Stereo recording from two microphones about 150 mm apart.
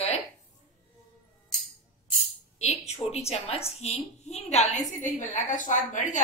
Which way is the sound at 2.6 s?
45° left (ahead or behind).